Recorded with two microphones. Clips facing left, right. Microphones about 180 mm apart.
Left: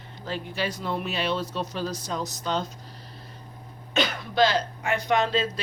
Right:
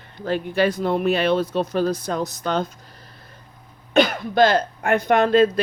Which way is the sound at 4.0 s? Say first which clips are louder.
Right 6 dB; 55° right (ahead or behind).